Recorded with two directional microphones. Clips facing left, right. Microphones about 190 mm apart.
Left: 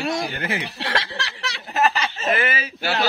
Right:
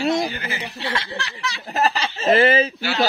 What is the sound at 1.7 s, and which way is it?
Speech, 35° right (ahead or behind).